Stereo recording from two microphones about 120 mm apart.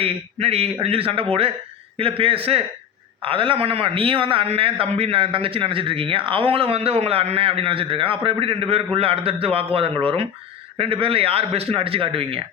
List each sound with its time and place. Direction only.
0.0 s a man's voice: 55° right (ahead or behind)